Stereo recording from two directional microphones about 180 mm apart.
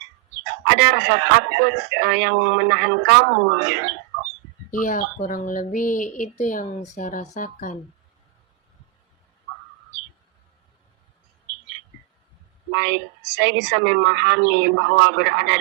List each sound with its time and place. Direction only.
0.7 s speech: 65° right (ahead or behind)
4.7 s speech: 45° left (ahead or behind)
12.7 s speech: 70° right (ahead or behind)